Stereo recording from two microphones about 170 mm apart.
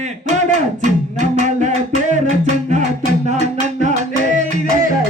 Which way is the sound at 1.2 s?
45° right (ahead or behind).